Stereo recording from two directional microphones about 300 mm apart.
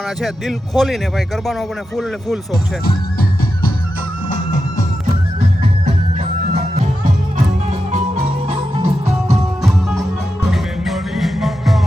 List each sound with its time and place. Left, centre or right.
0.2 s a man's voice: centre
2.8 s music: left
5.4 s music: right
8.7 s music: centre
10.5 s music: centre